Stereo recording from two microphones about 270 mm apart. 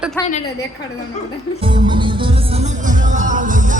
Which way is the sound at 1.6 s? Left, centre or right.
Centre.